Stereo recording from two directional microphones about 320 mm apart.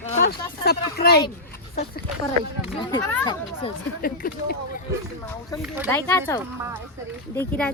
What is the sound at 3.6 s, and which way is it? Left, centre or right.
Speech, left.